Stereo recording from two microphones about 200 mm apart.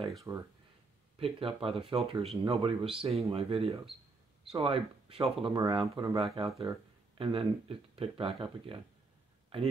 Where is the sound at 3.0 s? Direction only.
30° right (ahead or behind).